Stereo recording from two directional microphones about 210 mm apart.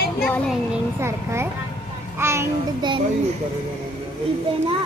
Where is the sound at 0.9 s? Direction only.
10° right (ahead or behind).